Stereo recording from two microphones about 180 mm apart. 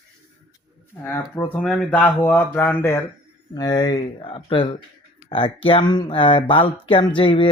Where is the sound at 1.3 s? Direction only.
10° left (ahead or behind).